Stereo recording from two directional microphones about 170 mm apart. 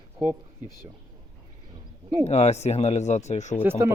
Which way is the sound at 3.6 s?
15° right (ahead or behind).